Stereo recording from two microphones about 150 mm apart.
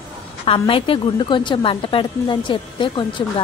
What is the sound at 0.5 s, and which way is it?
A woman's voice, 35° left (ahead or behind).